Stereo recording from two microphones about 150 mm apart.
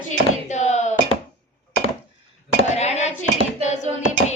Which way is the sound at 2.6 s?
45° left (ahead or behind).